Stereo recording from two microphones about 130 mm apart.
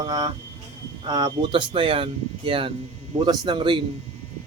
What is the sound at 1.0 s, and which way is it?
Speech, 35° right (ahead or behind).